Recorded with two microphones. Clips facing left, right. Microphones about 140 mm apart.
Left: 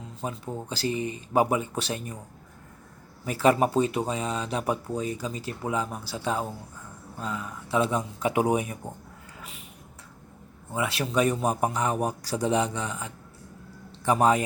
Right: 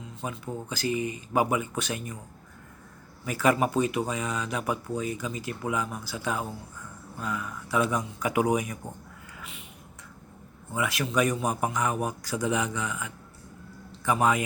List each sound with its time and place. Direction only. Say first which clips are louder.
0.2 s speech: left 1 dB; 30° left (ahead or behind)
3.2 s speech: left 2 dB; 30° left (ahead or behind)
9.4 s a sound: even; 40° left (ahead or behind)
10.8 s speech: left 1 dB; 30° left (ahead or behind)